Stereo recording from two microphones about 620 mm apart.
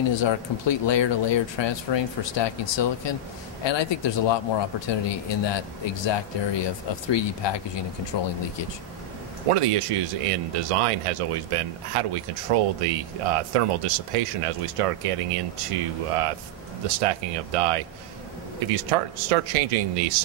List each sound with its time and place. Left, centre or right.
0.1 s speech: left
9.5 s speech: right
16.8 s speech: right